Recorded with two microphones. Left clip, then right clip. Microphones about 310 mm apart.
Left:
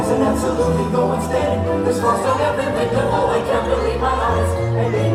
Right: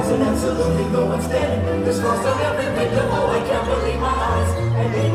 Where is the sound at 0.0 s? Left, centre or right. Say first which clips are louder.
Left 2 dB; left.